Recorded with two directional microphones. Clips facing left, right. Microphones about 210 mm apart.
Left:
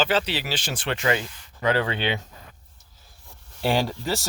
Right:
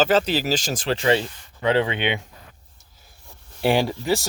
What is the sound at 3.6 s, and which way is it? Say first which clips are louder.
Speech: right 4 dB; 10° right (ahead or behind).